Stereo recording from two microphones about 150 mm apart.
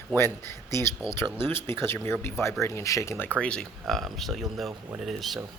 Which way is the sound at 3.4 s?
5° left (ahead or behind).